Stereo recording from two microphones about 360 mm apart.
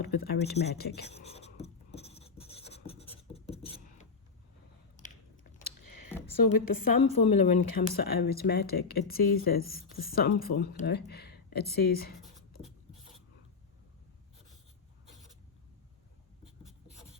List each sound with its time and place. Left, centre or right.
0.2 s speech: left
0.5 s writing: left
4.9 s biting: left
5.6 s a sound: left
6.3 s a woman's voice: left
7.1 s speech: centre
7.3 s a woman's voice: left
7.8 s speech: left